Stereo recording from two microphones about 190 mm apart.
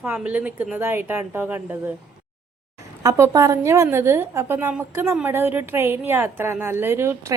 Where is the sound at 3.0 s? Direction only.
15° right (ahead or behind).